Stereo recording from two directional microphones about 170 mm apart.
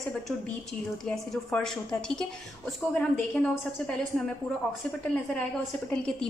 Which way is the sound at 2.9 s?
5° left (ahead or behind).